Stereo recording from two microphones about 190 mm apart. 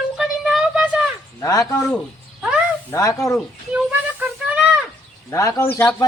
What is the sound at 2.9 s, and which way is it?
Speech, 15° left (ahead or behind).